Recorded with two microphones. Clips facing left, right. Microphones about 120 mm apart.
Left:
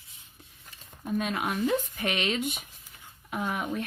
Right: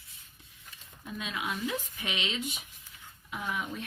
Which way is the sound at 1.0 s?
50° left (ahead or behind).